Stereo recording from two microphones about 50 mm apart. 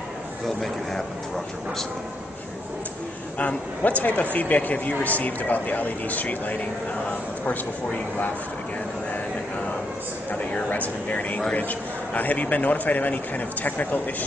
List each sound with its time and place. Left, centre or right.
3.3 s speech: left
10.3 s speech: left